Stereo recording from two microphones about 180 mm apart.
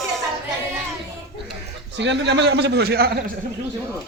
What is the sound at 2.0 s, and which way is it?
A man's voice, 75° right (ahead or behind).